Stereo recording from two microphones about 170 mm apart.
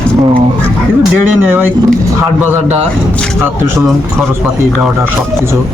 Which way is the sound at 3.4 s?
15° right (ahead or behind).